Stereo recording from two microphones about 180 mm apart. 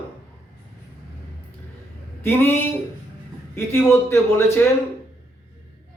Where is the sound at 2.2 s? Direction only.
10° left (ahead or behind).